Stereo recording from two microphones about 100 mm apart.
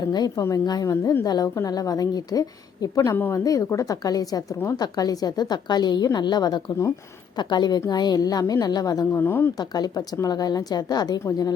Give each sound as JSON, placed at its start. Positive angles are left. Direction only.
{"t": 0.1, "sound": "a woman's voice", "side_deg": 45}
{"t": 3.1, "sound": "a woman's voice", "side_deg": 25}
{"t": 3.4, "sound": "a woman's voice", "side_deg": 35}
{"t": 9.2, "sound": "a woman's voice", "side_deg": 20}
{"t": 9.6, "sound": "a woman's voice", "side_deg": 40}